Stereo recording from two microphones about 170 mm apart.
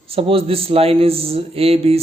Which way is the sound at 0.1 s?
35° right (ahead or behind).